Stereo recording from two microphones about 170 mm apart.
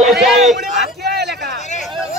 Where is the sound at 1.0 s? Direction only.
70° right (ahead or behind).